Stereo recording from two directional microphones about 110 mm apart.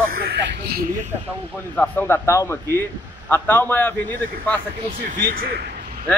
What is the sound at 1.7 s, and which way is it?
A man's voice, 20° left (ahead or behind).